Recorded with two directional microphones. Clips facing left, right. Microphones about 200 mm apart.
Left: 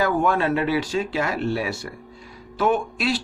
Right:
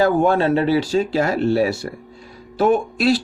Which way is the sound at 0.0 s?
30° right (ahead or behind).